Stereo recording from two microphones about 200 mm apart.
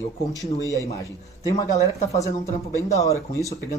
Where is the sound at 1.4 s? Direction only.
15° left (ahead or behind).